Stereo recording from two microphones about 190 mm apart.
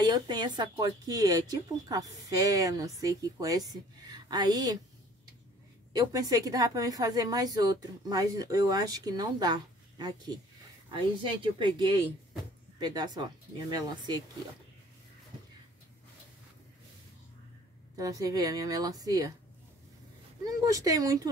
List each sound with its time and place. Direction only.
0.0 s speech: 20° right (ahead or behind)
5.9 s speech: 20° right (ahead or behind)
11.4 s speech: 25° right (ahead or behind)
17.9 s speech: 20° right (ahead or behind)
20.4 s speech: 15° right (ahead or behind)